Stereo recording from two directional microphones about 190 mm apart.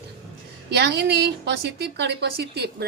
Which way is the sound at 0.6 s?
60° right (ahead or behind).